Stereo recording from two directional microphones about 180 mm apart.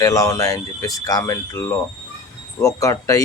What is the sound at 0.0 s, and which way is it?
Speech, 20° left (ahead or behind).